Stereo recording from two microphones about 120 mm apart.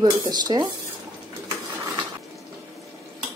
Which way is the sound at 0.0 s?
35° right (ahead or behind).